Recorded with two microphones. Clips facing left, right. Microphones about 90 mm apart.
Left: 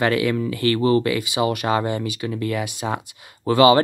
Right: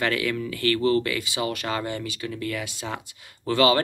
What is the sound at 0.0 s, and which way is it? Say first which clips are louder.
Speech: left 6 dB; 20° left (ahead or behind).